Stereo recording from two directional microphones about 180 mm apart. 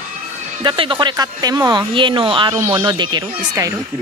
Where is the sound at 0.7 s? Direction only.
25° right (ahead or behind).